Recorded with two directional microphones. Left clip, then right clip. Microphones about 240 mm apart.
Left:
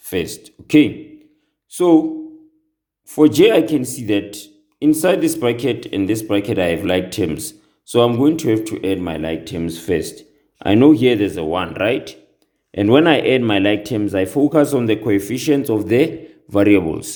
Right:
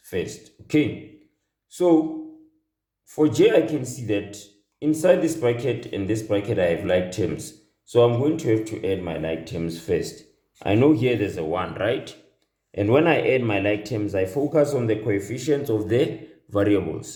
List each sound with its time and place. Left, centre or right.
0.0 s speech: left
3.1 s speech: left